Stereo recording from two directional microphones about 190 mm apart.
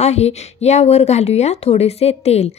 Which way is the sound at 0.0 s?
35° left (ahead or behind).